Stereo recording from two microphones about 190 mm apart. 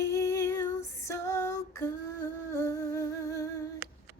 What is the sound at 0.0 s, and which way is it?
Female singing, 15° left (ahead or behind).